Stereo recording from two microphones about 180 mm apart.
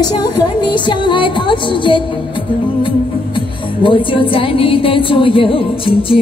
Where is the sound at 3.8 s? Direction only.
30° left (ahead or behind).